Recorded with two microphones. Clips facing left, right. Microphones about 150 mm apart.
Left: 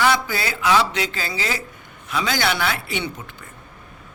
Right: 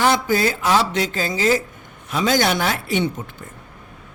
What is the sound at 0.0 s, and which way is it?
A man's voice, 45° right (ahead or behind).